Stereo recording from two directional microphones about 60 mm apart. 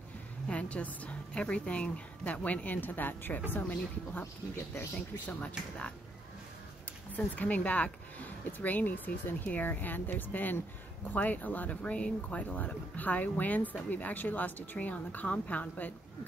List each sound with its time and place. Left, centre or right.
0.5 s speech: left
7.1 s speech: left